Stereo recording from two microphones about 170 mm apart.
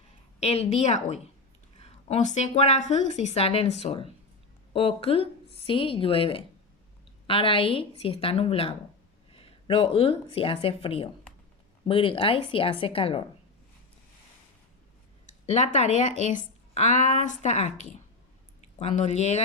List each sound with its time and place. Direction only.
0.3 s a woman's voice: 35° left (ahead or behind)
15.3 s speech: 40° left (ahead or behind)